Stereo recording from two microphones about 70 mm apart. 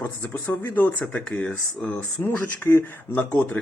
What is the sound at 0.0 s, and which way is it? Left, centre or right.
Speech, left.